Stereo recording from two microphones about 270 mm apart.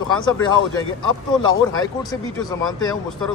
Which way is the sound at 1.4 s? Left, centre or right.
Centre.